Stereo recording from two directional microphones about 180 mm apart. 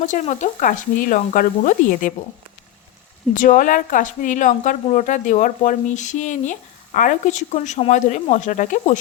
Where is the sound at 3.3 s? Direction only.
50° left (ahead or behind).